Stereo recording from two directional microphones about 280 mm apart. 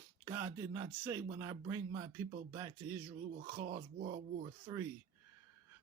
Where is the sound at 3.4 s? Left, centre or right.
Right.